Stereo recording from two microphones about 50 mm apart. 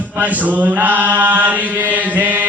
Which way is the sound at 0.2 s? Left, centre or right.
Right.